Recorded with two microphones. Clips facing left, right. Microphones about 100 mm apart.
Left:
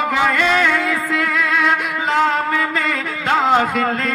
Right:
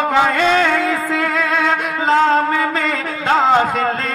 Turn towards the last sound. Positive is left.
turn(degrees=-30)  # may be behind; listen again after turning